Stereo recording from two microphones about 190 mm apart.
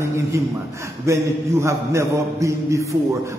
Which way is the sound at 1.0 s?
15° right (ahead or behind).